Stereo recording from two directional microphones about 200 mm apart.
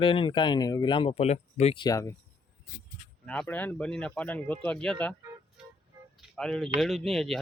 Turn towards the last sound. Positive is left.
turn(degrees=0)  # may be behind; listen again after turning